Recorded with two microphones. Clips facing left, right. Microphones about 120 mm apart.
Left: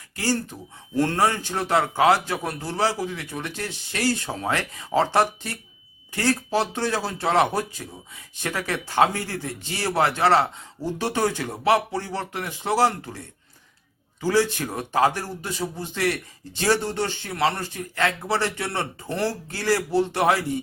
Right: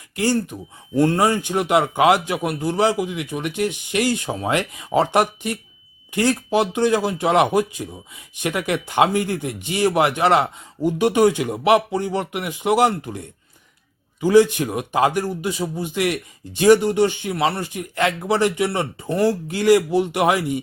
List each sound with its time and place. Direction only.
0.2 s speech: 20° right (ahead or behind)